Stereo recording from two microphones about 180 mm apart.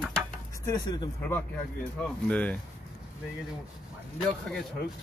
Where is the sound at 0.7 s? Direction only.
25° left (ahead or behind).